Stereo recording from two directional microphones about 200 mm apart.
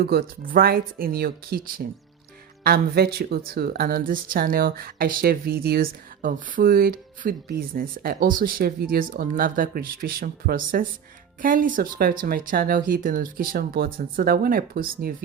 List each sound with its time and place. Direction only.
0.0 s speech: 50° right (ahead or behind)